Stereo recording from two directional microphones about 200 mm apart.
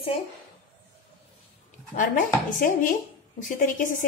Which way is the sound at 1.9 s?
40° left (ahead or behind).